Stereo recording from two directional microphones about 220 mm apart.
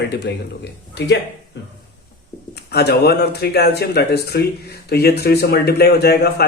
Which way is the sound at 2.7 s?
45° left (ahead or behind).